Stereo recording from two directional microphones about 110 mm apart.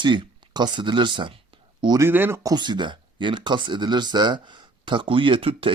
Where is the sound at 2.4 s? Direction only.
40° right (ahead or behind).